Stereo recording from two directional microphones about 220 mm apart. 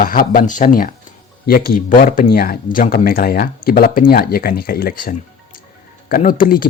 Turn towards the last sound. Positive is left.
turn(degrees=40)  # may be behind; listen again after turning